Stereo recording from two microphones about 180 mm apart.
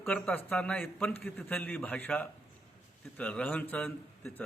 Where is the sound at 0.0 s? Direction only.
5° left (ahead or behind).